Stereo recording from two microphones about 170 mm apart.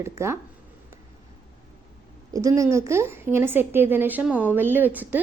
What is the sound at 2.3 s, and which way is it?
A woman's voice, 20° right (ahead or behind).